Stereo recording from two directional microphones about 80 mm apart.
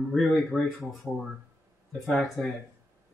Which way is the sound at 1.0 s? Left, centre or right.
Right.